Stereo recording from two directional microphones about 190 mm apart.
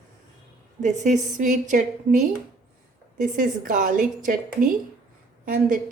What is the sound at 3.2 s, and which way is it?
A woman's voice, 45° right (ahead or behind).